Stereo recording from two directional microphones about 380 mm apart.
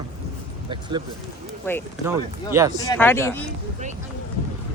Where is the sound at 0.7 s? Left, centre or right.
Centre.